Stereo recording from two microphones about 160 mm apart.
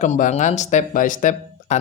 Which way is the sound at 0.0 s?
50° left (ahead or behind).